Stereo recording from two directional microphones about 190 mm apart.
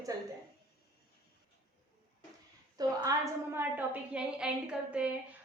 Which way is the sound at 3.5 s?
10° right (ahead or behind).